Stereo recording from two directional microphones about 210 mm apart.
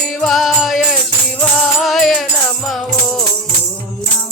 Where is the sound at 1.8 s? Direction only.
Centre (ahead or behind).